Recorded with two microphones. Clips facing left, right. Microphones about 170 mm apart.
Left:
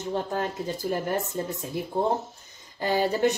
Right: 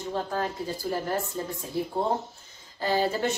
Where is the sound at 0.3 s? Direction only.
20° left (ahead or behind).